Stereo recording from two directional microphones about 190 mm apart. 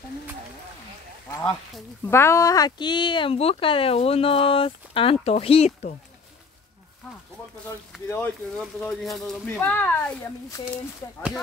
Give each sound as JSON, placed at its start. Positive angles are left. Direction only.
{"t": 2.0, "sound": "speech", "side_deg": 15}
{"t": 8.1, "sound": "speech", "side_deg": 10}